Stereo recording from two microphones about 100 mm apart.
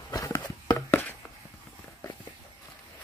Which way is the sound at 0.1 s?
35° left (ahead or behind).